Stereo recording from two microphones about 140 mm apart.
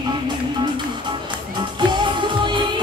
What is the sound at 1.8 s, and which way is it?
Music, 35° right (ahead or behind).